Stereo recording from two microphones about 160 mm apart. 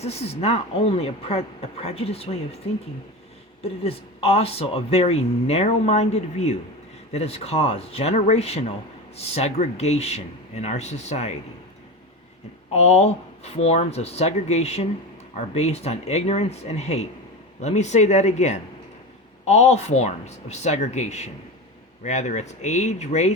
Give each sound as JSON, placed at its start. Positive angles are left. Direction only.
{"t": 0.0, "sound": "speech", "side_deg": 40}
{"t": 3.6, "sound": "speech", "side_deg": 40}
{"t": 12.7, "sound": "speech", "side_deg": 40}